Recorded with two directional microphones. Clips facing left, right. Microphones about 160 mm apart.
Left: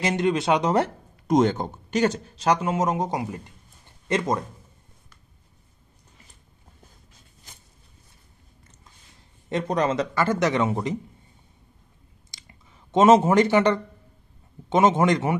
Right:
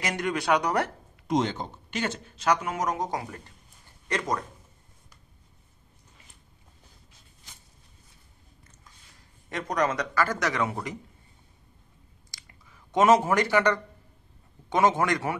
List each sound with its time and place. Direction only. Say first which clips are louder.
0.0 s speech: left 6 dB; 25° left (ahead or behind)
1.2 s speech: left 6 dB; 45° left (ahead or behind); by 4.5 s 25° left (ahead or behind)
9.5 s speech: left 4 dB; 25° left (ahead or behind)
12.3 s a sound: left 3 dB; 25° left (ahead or behind)
14.7 s speech: left 4 dB; 20° left (ahead or behind)